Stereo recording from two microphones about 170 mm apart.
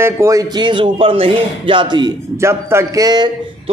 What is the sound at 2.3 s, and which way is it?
Speech, 15° right (ahead or behind).